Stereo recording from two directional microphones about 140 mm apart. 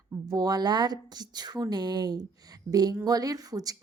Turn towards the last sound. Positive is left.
turn(degrees=-25)  # may be behind; listen again after turning